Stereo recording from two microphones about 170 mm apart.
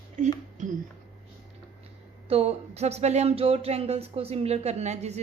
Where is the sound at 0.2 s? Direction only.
45° right (ahead or behind).